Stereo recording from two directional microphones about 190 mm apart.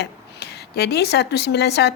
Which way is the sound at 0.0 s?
60° left (ahead or behind).